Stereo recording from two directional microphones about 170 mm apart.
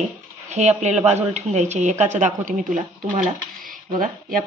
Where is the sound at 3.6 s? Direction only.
55° right (ahead or behind).